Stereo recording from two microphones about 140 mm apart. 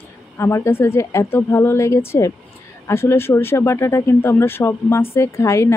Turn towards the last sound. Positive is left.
turn(degrees=20)  # may be behind; listen again after turning